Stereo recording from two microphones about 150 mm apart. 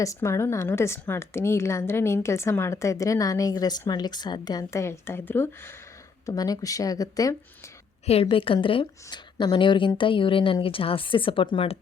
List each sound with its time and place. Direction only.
0.0 s speech: 20° left (ahead or behind)
6.2 s speech: 25° left (ahead or behind)
8.0 s a woman's voice: 40° left (ahead or behind)